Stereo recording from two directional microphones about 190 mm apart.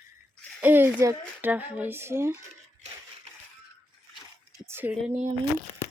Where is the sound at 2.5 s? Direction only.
35° right (ahead or behind).